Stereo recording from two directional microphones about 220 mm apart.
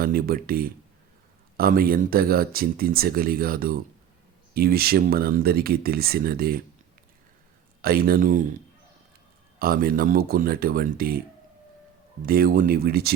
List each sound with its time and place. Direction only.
0.0 s speech: 40° right (ahead or behind)
7.8 s speech: 45° right (ahead or behind)
9.6 s speech: 40° right (ahead or behind)
12.2 s speech: 40° right (ahead or behind)